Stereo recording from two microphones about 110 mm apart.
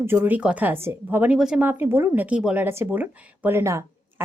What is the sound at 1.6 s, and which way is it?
Speech, 20° right (ahead or behind).